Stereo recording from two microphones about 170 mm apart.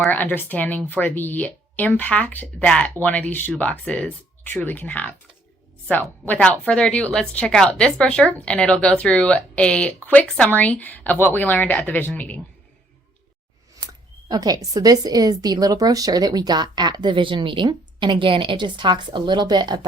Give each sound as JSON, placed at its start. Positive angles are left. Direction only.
{"t": 0.0, "sound": "speech", "side_deg": 10}
{"t": 13.8, "sound": "a woman's voice", "side_deg": -20}